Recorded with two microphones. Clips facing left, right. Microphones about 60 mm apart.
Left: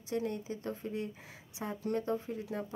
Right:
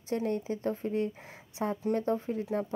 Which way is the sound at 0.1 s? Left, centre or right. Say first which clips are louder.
Right 5 dB; right.